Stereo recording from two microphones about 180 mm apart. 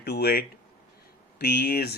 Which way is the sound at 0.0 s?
65° left (ahead or behind).